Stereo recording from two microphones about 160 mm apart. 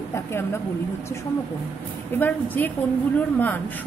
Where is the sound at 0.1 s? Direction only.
15° left (ahead or behind).